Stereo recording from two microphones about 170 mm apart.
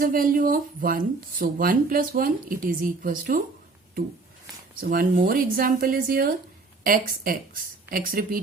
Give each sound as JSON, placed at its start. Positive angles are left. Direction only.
{"t": 0.0, "sound": "speech", "side_deg": -55}
{"t": 4.8, "sound": "speech", "side_deg": -55}